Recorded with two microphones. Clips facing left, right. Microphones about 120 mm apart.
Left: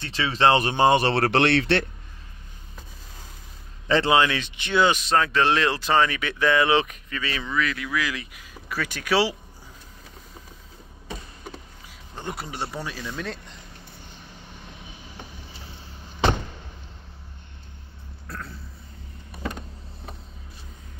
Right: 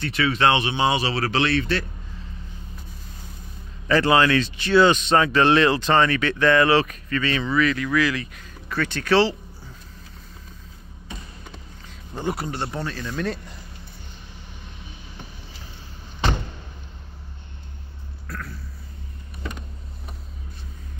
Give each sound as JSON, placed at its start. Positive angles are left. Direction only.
{"t": 0.0, "sound": "speech", "side_deg": 30}
{"t": 3.8, "sound": "speech", "side_deg": 25}
{"t": 12.3, "sound": "speech", "side_deg": 0}
{"t": 18.3, "sound": "a sound", "side_deg": 25}